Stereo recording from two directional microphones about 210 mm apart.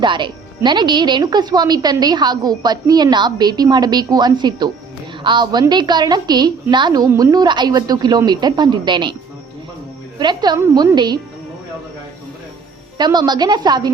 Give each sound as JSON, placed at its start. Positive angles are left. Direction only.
{"t": 0.0, "sound": "speech", "side_deg": -20}
{"t": 10.2, "sound": "speech", "side_deg": -20}
{"t": 13.0, "sound": "speech", "side_deg": -20}